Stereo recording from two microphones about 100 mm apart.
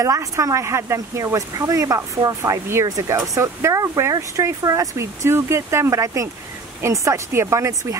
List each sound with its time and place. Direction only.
0.0 s speech: 35° right (ahead or behind)